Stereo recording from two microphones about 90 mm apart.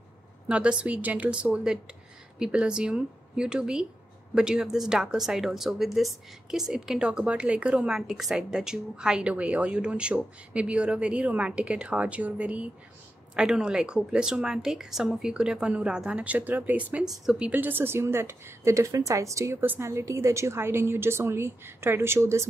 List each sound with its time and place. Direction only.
0.5 s a woman's voice: 10° right (ahead or behind); by 22.5 s 30° right (ahead or behind)